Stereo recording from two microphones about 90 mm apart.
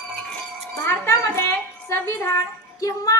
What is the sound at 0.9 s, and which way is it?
A woman's voice, 30° left (ahead or behind).